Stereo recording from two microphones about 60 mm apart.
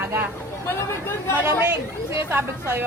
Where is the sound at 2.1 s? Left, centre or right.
Right.